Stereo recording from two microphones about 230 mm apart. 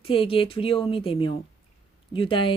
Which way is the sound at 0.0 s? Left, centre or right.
Left.